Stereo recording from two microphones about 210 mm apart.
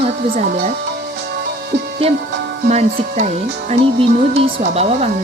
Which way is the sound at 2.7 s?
30° right (ahead or behind).